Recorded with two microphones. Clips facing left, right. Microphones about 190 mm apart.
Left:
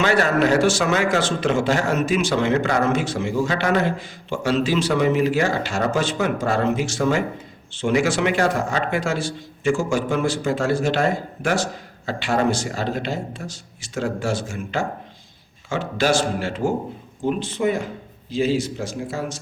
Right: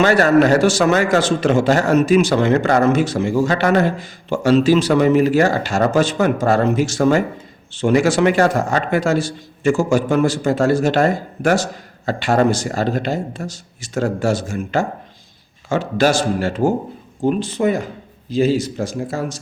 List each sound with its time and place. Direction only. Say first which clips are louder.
0.0 s a man's voice: right 6 dB; 40° right (ahead or behind)